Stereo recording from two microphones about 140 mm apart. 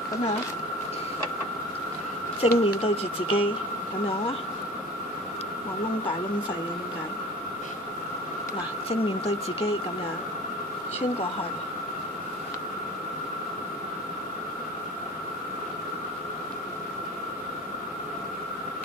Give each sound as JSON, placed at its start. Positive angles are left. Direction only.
{"t": 2.4, "sound": "speech", "side_deg": 45}
{"t": 8.8, "sound": "speech", "side_deg": 45}